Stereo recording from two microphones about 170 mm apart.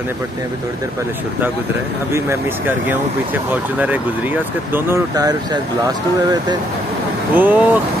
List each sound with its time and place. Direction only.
4.7 s speech: 15° right (ahead or behind)
7.3 s speech: 10° right (ahead or behind)